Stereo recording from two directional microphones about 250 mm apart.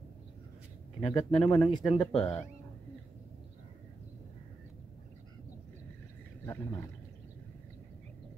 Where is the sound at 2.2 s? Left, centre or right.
Centre.